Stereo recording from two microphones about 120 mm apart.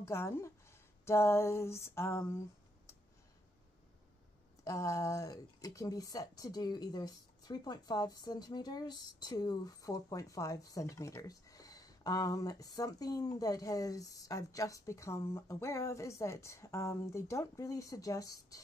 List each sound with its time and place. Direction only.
0.0 s speech: 25° left (ahead or behind)
4.6 s speech: 25° left (ahead or behind)